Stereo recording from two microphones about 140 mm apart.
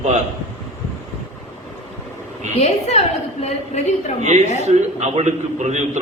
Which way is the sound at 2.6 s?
50° left (ahead or behind).